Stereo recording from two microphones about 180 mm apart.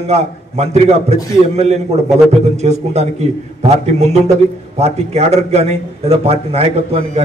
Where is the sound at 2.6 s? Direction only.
35° right (ahead or behind).